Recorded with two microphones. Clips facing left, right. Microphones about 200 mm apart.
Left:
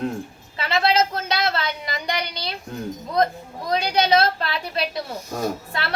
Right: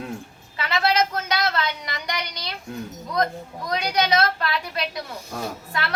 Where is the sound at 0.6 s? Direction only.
30° left (ahead or behind).